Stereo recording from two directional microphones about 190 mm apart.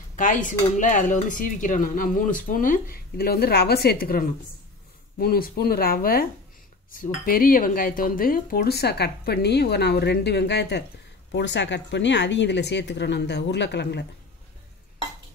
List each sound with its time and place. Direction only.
0.1 s speech: 45° left (ahead or behind); by 14.0 s 60° left (ahead or behind)